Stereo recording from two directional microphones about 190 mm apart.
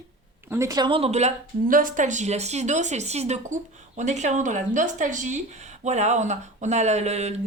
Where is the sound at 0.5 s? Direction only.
15° right (ahead or behind).